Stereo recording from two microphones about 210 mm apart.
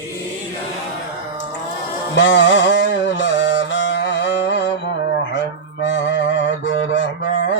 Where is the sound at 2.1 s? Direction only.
60° left (ahead or behind).